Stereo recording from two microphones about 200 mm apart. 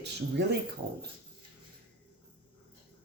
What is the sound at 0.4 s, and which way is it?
Speech, 60° right (ahead or behind).